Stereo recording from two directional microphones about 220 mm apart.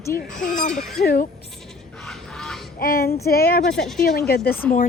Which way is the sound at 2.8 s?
40° left (ahead or behind).